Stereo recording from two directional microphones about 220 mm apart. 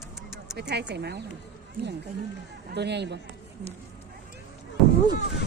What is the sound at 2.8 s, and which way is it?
Speech, 50° right (ahead or behind).